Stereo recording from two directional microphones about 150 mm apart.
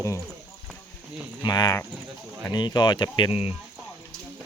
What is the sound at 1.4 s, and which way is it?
Speech, 25° left (ahead or behind).